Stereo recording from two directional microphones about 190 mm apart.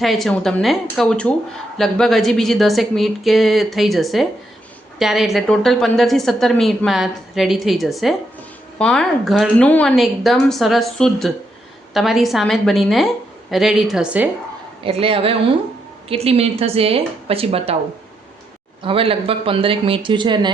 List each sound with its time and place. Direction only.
0.0 s a woman's voice: centre (ahead or behind)
14.8 s speech: 30° right (ahead or behind)
18.8 s speech: 30° right (ahead or behind)